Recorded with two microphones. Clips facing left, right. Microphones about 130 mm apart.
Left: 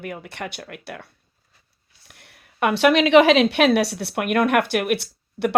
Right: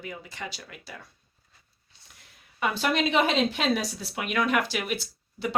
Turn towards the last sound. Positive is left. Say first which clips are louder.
# left 8 dB
turn(degrees=65)  # may be behind; listen again after turning